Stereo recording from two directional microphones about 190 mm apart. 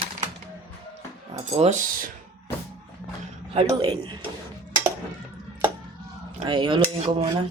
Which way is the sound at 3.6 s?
20° right (ahead or behind).